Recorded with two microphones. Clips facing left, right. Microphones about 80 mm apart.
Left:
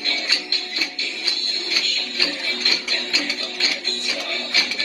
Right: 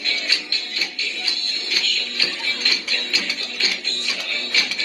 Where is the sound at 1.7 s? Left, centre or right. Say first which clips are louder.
Right 2 dB; left.